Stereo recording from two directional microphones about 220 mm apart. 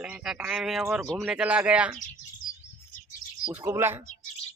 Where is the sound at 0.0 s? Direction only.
5° right (ahead or behind).